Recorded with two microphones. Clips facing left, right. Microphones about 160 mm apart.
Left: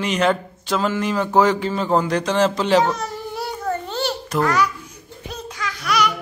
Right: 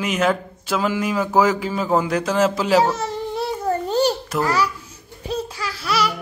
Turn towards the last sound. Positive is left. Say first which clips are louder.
# left 1 dB
turn(degrees=-30)  # may be behind; listen again after turning